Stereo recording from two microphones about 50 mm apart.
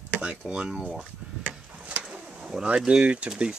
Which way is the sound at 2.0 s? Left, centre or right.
Centre.